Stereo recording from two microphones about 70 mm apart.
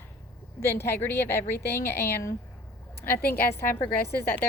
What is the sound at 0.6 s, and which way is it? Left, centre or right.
Speech, left.